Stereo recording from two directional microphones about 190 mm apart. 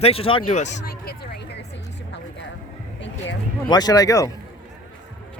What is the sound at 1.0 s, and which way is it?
Vehicle, 55° left (ahead or behind).